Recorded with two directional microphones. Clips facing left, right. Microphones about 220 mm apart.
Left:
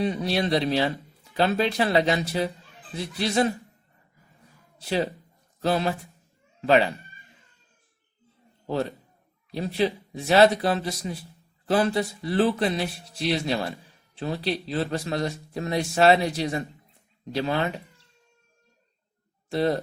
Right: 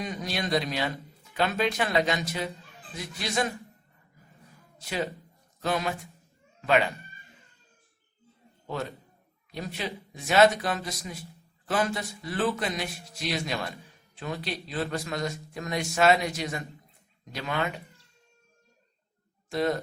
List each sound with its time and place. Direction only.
0.0 s speech: 30° left (ahead or behind)
4.8 s speech: 35° left (ahead or behind)
8.6 s a man's voice: 30° left (ahead or behind)
19.5 s speech: 30° left (ahead or behind)